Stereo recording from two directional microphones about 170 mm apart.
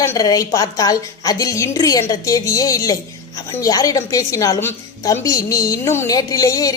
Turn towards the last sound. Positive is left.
turn(degrees=20)  # may be behind; listen again after turning